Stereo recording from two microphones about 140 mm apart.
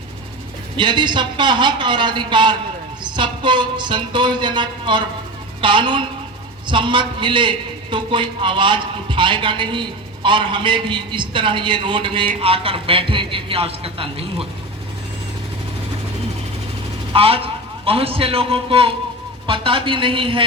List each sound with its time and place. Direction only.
0.8 s a man's voice: 35° right (ahead or behind)
17.1 s a man's voice: 40° right (ahead or behind)